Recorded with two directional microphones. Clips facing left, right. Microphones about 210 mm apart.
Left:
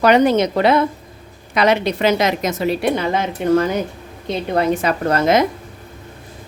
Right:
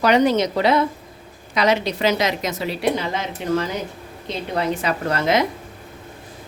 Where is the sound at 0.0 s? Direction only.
55° left (ahead or behind).